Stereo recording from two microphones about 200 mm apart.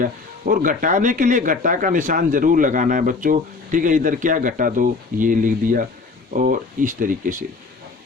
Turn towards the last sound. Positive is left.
turn(degrees=-40)  # may be behind; listen again after turning